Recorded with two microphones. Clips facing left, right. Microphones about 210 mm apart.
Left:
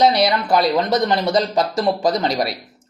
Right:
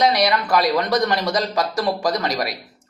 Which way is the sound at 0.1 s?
25° left (ahead or behind).